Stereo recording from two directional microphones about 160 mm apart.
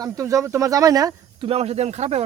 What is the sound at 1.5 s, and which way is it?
Speech, 40° right (ahead or behind).